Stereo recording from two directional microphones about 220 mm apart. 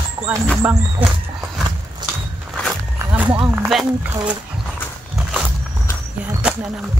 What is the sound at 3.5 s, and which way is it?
Speech, 10° right (ahead or behind).